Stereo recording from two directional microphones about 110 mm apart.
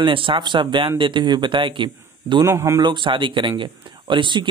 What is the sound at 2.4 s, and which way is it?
Speech, 25° right (ahead or behind).